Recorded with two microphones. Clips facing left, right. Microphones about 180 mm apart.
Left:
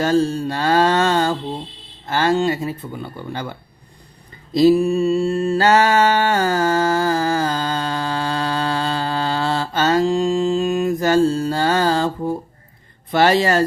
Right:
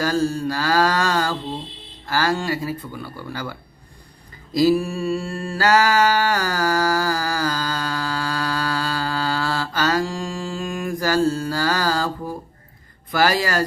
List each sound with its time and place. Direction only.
0.0 s mantra: 25° left (ahead or behind)
2.0 s speech: 25° left (ahead or behind)
4.5 s mantra: 25° left (ahead or behind)
13.1 s speech: 25° left (ahead or behind)